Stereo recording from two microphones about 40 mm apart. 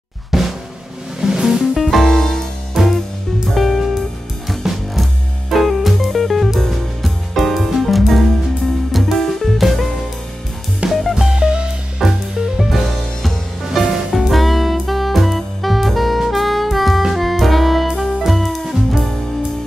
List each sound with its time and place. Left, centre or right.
0.3 s drum: centre
1.2 s music: centre
1.8 s music: centre
2.8 s music: centre
10.9 s music: centre
11.3 s music: right
12.0 s music: centre
14.2 s saxophone: centre
17.1 s music: centre